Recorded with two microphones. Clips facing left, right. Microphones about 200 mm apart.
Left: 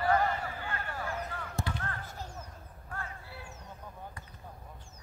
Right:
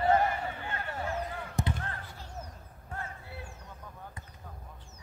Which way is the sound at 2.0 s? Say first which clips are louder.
Left 4 dB; 45° left (ahead or behind).